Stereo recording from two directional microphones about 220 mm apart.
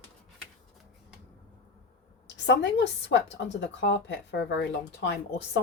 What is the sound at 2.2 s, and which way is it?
A woman's voice, 55° left (ahead or behind).